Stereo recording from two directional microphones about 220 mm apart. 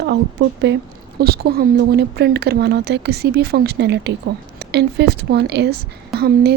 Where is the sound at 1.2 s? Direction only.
45° right (ahead or behind).